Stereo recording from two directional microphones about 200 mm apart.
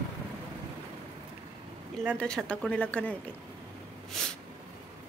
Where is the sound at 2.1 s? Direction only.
5° left (ahead or behind).